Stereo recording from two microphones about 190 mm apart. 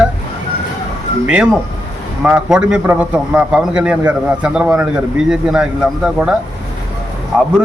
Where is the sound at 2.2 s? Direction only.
5° right (ahead or behind).